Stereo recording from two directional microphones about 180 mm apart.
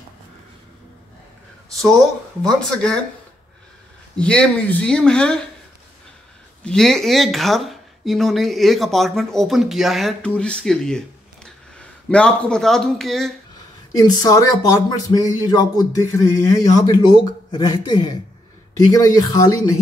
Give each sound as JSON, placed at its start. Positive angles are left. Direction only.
{"t": 2.4, "sound": "speech", "side_deg": 5}
{"t": 4.2, "sound": "speech", "side_deg": 5}
{"t": 6.6, "sound": "speech", "side_deg": 5}
{"t": 12.1, "sound": "speech", "side_deg": 5}
{"t": 14.0, "sound": "a man's voice", "side_deg": 20}